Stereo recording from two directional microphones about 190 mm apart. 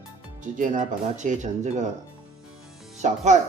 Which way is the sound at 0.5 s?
45° right (ahead or behind).